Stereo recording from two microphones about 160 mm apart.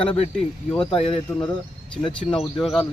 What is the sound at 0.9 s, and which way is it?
Speech, 35° left (ahead or behind).